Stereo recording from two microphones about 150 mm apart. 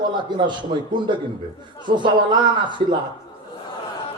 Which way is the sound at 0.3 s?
30° right (ahead or behind).